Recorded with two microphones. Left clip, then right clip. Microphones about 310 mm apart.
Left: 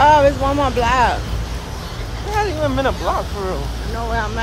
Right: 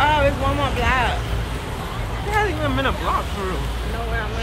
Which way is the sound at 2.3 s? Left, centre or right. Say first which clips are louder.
Left 2 dB; left.